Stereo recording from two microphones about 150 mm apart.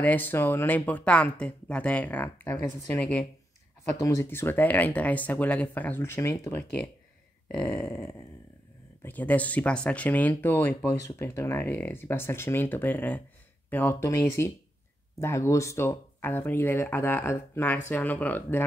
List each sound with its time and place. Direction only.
0.0 s speech: 10° left (ahead or behind)
4.0 s speech: 20° left (ahead or behind)
7.4 s speech: 5° left (ahead or behind)